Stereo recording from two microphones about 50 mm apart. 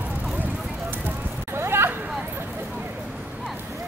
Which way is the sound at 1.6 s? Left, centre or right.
Right.